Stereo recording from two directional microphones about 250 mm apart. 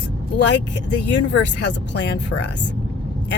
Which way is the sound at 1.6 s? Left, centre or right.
Left.